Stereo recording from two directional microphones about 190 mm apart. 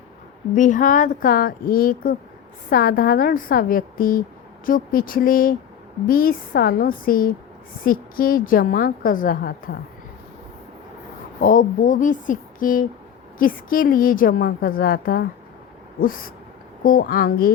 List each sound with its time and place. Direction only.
0.5 s a woman's voice: 40° left (ahead or behind)
11.3 s a woman's voice: 45° left (ahead or behind)
16.8 s a woman's voice: 50° left (ahead or behind)